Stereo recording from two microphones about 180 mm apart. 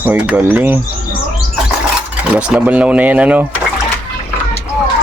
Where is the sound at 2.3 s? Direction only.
5° right (ahead or behind).